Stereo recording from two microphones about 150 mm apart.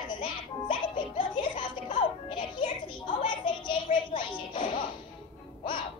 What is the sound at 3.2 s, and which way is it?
Music, 35° left (ahead or behind).